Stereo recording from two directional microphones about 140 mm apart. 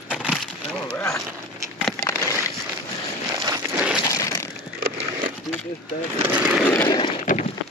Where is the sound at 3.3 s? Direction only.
25° right (ahead or behind).